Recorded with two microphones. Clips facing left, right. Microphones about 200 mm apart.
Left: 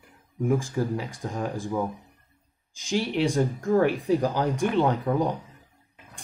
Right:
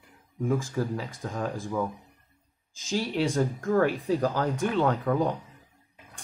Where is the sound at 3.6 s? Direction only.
15° left (ahead or behind).